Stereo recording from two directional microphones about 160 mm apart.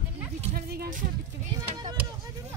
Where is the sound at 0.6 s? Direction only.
70° right (ahead or behind).